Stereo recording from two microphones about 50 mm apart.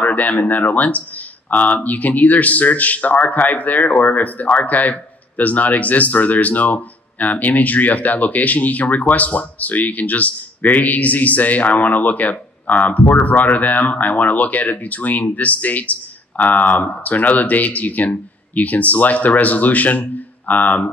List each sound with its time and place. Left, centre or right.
0.0 s speech: left